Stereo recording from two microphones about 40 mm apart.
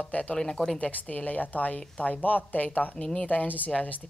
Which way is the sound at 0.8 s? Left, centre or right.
Left.